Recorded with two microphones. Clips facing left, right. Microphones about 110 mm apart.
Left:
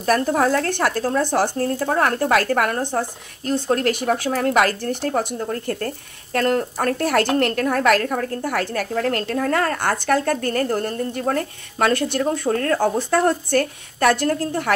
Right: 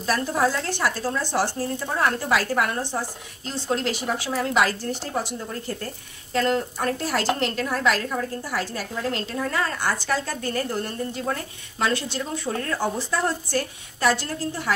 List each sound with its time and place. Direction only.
0.0 s a woman's voice: 55° left (ahead or behind)